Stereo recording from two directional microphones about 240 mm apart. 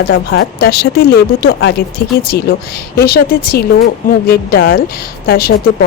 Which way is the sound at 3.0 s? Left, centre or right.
Left.